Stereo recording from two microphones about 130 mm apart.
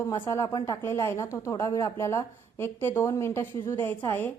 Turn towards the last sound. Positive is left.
turn(degrees=15)  # may be behind; listen again after turning